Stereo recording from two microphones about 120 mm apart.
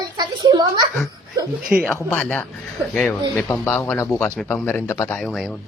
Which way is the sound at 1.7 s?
10° right (ahead or behind).